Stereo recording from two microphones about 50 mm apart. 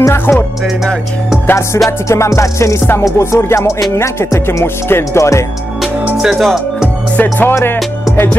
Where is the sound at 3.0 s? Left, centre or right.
Left.